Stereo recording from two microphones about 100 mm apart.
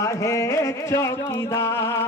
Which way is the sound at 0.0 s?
30° left (ahead or behind).